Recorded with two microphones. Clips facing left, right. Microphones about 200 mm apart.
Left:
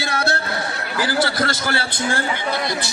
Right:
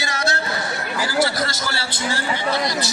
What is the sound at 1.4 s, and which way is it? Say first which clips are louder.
Speech: left 4 dB; 55° left (ahead or behind).